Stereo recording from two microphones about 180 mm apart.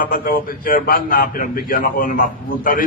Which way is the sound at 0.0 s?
55° left (ahead or behind).